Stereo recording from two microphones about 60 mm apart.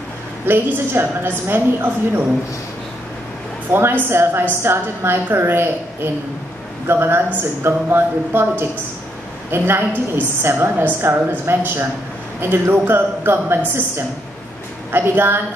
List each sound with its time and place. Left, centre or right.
0.5 s a woman's voice: right
3.7 s a woman's voice: right
14.9 s a woman's voice: right